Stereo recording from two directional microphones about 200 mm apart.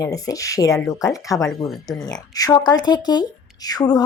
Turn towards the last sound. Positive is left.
turn(degrees=20)  # may be behind; listen again after turning